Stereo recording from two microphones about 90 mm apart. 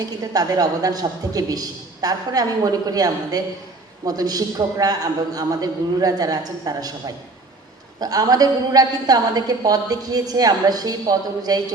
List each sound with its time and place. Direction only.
0.2 s a woman's voice: 45° right (ahead or behind)
7.9 s a woman's voice: 45° right (ahead or behind)